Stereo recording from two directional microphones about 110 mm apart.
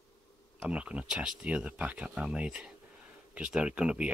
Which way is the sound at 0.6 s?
10° right (ahead or behind).